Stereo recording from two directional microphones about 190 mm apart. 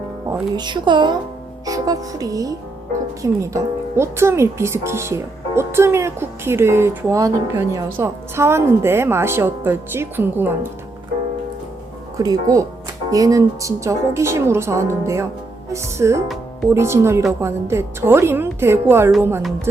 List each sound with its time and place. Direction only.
0.5 s speech: 25° right (ahead or behind)
12.1 s speech: 20° right (ahead or behind)